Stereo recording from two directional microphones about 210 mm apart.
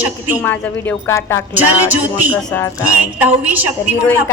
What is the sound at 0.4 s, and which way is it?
A woman's voice, 10° left (ahead or behind).